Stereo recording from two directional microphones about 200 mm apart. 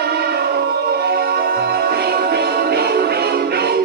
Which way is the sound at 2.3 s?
55° right (ahead or behind).